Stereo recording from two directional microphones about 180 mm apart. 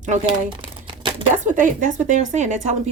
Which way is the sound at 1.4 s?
45° right (ahead or behind).